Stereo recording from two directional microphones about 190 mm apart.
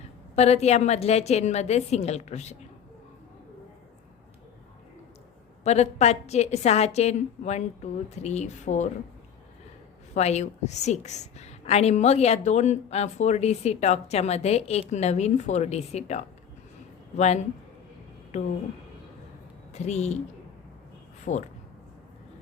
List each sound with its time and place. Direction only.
0.3 s a woman's voice: 35° left (ahead or behind)
5.6 s a woman's voice: 35° left (ahead or behind)
10.2 s a woman's voice: 35° left (ahead or behind)
19.7 s a woman's voice: 35° left (ahead or behind)
21.3 s a woman's voice: 40° left (ahead or behind)